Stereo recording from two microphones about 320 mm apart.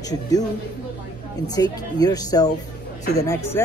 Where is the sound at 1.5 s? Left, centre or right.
Centre.